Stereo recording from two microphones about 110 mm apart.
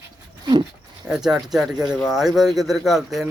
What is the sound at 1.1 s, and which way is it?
Speech, 5° right (ahead or behind).